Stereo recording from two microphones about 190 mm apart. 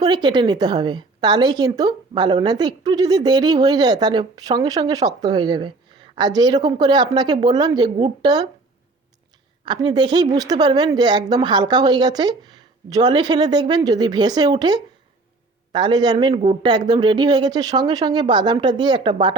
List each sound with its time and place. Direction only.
0.0 s a woman's voice: 25° right (ahead or behind)
9.6 s a woman's voice: 20° right (ahead or behind)